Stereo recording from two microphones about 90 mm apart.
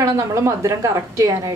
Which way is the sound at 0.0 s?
35° right (ahead or behind).